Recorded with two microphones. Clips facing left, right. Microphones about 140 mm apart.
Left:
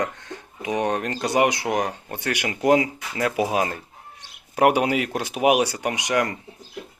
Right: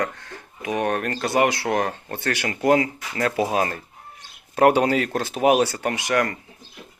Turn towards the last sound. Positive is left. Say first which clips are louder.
# right 1 dB
turn(degrees=20)  # may be behind; listen again after turning